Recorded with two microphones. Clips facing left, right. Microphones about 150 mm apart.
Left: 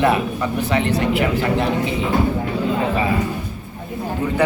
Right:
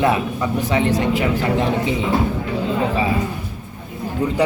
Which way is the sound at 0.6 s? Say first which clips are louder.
Right 1 dB; 15° right (ahead or behind).